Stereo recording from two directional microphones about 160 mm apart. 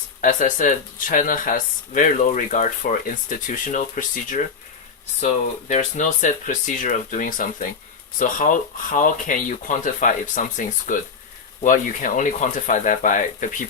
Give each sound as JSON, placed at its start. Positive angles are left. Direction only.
{"t": 0.2, "sound": "speech", "side_deg": 55}